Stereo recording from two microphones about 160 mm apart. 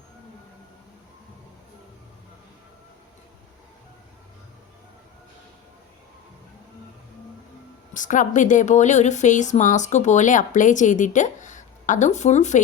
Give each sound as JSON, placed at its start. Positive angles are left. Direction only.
{"t": 7.9, "sound": "a woman's voice", "side_deg": 55}